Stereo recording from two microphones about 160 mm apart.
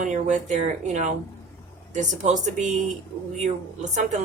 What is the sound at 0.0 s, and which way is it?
A woman's voice, 50° right (ahead or behind).